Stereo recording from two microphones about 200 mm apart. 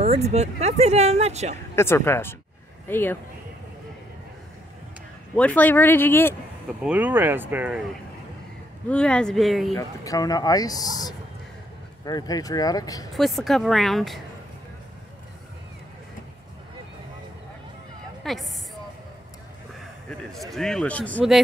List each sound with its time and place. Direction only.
0.0 s speech: 30° right (ahead or behind)
1.8 s speech: 10° left (ahead or behind)
5.3 s speech: 5° left (ahead or behind)
6.8 s speech: 5° right (ahead or behind)
8.8 s speech: 5° left (ahead or behind)
9.8 s speech: 15° left (ahead or behind)
13.1 s speech: centre (ahead or behind)
18.2 s a sound: centre (ahead or behind)
20.5 s speech: centre (ahead or behind)